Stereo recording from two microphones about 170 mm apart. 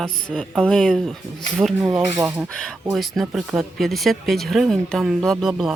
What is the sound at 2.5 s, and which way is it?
Speech, 5° left (ahead or behind).